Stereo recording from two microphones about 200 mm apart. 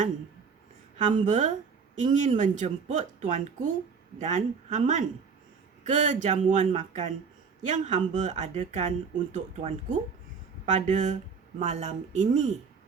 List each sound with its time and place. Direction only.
1.1 s speech: 35° right (ahead or behind)